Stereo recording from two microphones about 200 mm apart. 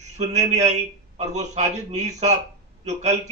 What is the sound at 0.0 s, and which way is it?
A man's voice, 35° right (ahead or behind).